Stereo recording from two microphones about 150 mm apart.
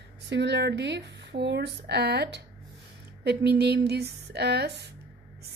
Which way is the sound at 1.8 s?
90° right.